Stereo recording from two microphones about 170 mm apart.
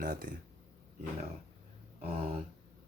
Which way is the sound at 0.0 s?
55° right (ahead or behind).